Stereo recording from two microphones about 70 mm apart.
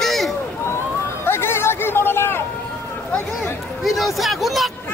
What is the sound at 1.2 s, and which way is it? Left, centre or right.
Music, left.